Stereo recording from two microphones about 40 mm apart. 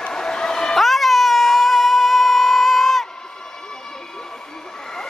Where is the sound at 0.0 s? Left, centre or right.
Centre.